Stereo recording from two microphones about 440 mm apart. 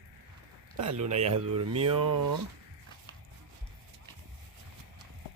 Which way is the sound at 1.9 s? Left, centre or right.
Right.